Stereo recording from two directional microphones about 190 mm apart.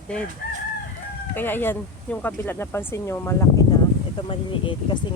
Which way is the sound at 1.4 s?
10° left (ahead or behind).